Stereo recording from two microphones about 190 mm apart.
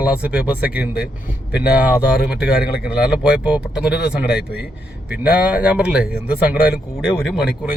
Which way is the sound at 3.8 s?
60° left (ahead or behind).